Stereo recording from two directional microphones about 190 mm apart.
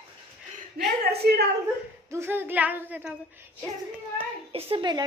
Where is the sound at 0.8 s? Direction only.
55° right (ahead or behind).